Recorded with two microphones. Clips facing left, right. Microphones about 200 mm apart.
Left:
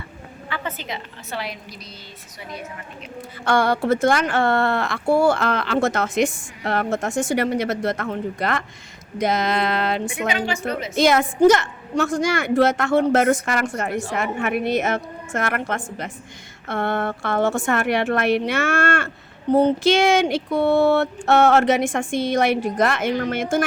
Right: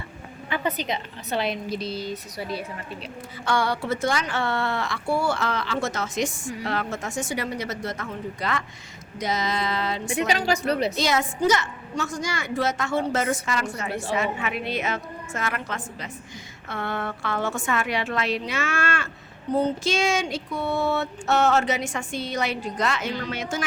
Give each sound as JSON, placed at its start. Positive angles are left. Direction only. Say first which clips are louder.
{"t": 0.5, "sound": "a woman's voice", "louder": "right 3 dB", "side_deg": -15}
{"t": 3.4, "sound": "a woman's voice", "louder": "left 6 dB", "side_deg": 55}
{"t": 10.2, "sound": "a woman's voice", "louder": "right 1 dB", "side_deg": -35}
{"t": 10.9, "sound": "a woman's voice", "louder": "left 7 dB", "side_deg": 55}